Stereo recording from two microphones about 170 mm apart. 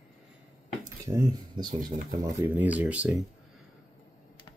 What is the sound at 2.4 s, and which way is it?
Speech, 10° right (ahead or behind).